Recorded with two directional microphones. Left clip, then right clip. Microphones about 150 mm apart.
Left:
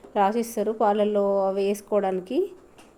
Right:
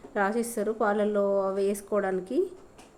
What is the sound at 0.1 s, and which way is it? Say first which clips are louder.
A woman's voice: left 5 dB; 15° left (ahead or behind).